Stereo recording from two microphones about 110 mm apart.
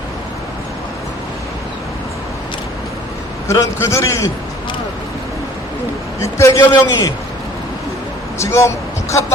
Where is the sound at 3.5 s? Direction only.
25° left (ahead or behind).